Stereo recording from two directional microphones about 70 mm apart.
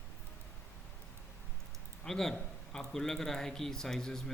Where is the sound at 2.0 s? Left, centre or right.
Centre.